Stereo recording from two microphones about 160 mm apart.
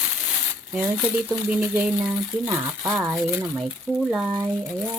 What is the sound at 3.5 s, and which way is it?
Speech, centre (ahead or behind).